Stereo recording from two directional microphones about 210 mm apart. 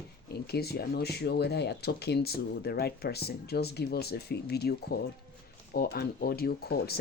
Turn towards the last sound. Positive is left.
turn(degrees=45)  # may be behind; listen again after turning